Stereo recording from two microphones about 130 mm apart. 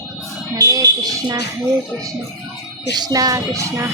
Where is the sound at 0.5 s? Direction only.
25° right (ahead or behind).